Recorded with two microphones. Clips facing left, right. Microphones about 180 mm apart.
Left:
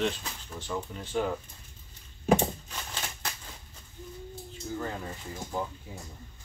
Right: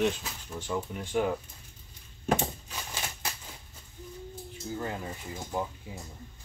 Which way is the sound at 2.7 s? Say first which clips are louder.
Even; 10° right (ahead or behind).